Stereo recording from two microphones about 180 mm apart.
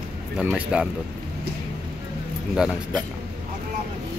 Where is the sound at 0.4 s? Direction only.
5° right (ahead or behind).